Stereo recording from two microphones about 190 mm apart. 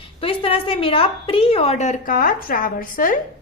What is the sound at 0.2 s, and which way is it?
A woman's voice, 30° left (ahead or behind).